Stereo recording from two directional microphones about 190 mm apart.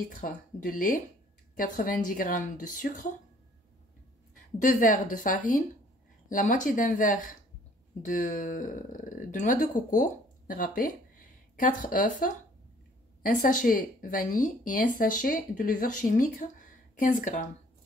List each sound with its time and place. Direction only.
0.1 s speech: 45° left (ahead or behind)
4.6 s speech: 45° left (ahead or behind)